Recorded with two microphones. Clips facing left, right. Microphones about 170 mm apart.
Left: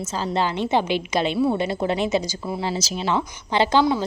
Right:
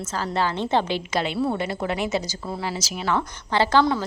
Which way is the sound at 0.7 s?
15° left (ahead or behind).